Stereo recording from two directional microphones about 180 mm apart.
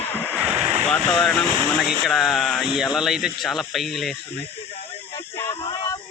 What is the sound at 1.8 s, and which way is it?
Speech, centre (ahead or behind).